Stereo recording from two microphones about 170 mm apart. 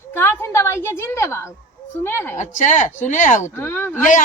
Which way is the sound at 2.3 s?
45° left (ahead or behind).